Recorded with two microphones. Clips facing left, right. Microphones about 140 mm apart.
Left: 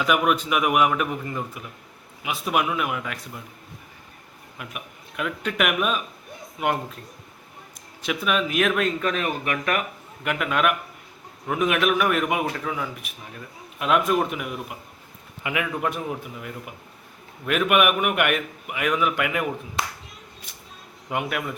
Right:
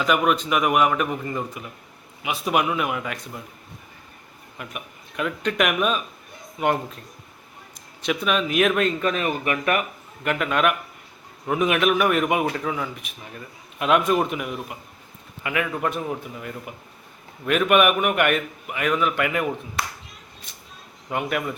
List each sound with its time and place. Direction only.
0.0 s a man's voice: 5° left (ahead or behind)
4.5 s a man's voice: 5° left (ahead or behind)
8.0 s a man's voice: 5° left (ahead or behind)
15.4 s a man's voice: 10° left (ahead or behind)
19.8 s speech: 25° left (ahead or behind)
21.1 s a man's voice: 5° left (ahead or behind)